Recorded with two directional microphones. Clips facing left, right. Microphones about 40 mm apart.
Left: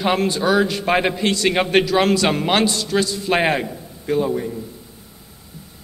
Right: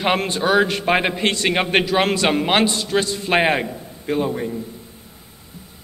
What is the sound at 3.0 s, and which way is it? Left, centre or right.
Speech, right.